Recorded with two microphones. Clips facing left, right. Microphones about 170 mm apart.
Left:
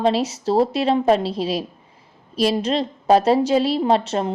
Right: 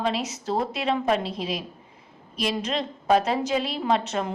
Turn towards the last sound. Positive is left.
turn(degrees=30)  # may be behind; listen again after turning